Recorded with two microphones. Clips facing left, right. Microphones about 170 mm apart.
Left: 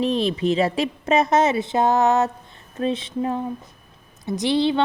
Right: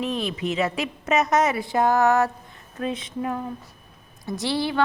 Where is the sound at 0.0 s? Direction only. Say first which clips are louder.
Left 6 dB; 30° left (ahead or behind).